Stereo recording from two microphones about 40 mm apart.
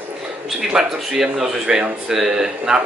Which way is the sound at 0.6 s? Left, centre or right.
Centre.